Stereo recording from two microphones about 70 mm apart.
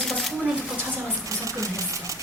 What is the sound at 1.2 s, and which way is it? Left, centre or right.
Speech, right.